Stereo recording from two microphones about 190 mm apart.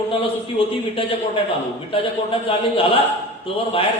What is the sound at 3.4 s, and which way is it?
Speech, 30° left (ahead or behind).